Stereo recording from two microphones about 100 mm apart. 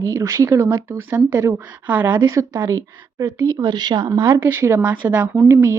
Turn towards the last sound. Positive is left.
turn(degrees=-30)  # may be behind; listen again after turning